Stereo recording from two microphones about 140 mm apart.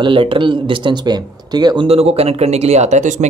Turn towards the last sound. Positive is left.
turn(degrees=-60)  # may be behind; listen again after turning